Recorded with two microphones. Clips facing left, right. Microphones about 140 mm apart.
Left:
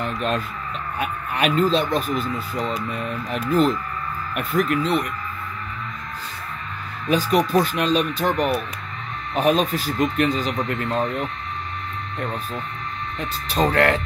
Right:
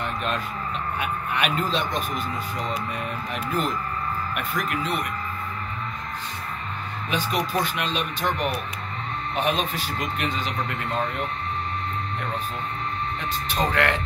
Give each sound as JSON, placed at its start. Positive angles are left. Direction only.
{"t": 0.0, "sound": "speech", "side_deg": 40}
{"t": 7.1, "sound": "speech", "side_deg": 40}
{"t": 13.5, "sound": "speech", "side_deg": 35}